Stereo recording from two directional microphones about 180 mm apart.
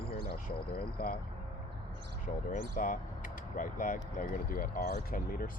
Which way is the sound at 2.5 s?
45° left (ahead or behind).